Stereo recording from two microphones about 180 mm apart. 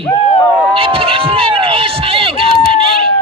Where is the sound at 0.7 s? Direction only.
30° right (ahead or behind).